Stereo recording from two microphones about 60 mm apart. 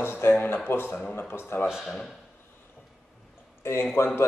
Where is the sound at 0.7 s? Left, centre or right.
Left.